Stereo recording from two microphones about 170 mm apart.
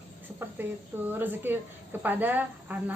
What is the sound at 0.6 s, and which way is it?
Speech, 10° right (ahead or behind).